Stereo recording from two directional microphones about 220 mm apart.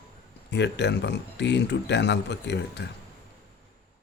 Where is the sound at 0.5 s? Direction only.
50° left (ahead or behind).